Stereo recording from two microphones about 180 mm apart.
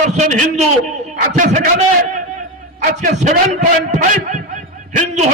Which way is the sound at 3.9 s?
45° right (ahead or behind).